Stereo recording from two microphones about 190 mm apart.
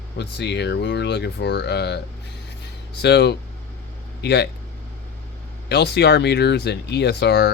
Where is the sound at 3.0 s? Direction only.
60° left (ahead or behind).